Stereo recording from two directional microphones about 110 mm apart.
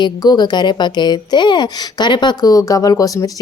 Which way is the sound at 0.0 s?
40° left (ahead or behind).